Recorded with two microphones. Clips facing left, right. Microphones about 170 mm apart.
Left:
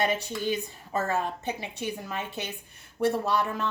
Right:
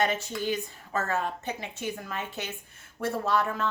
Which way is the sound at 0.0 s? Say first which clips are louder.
Even; 15° left (ahead or behind).